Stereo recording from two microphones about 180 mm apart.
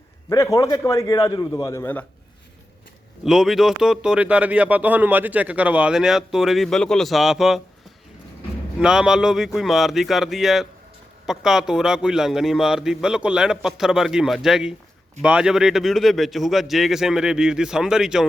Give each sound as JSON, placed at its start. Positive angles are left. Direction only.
{"t": 0.3, "sound": "a man's voice", "side_deg": 15}
{"t": 3.2, "sound": "speech", "side_deg": 0}
{"t": 8.8, "sound": "speech", "side_deg": -5}